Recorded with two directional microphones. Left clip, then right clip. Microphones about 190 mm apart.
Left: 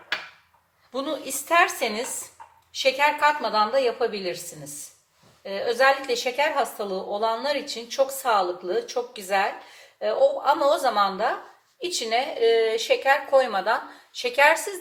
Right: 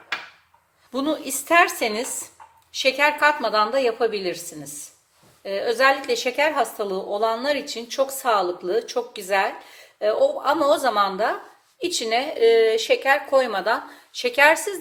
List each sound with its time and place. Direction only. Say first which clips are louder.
0.9 s a woman's voice: right 4 dB; 55° right (ahead or behind)
5.4 s a woman's voice: right 2 dB; 55° right (ahead or behind)